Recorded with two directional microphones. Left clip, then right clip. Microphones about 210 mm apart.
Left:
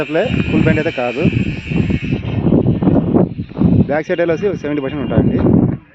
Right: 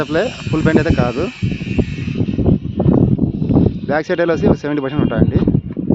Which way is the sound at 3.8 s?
Centre (ahead or behind).